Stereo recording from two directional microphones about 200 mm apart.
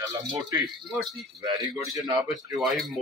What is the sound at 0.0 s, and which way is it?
Speech, 20° right (ahead or behind).